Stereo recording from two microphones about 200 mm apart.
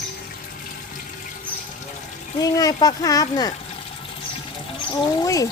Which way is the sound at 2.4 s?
20° left (ahead or behind).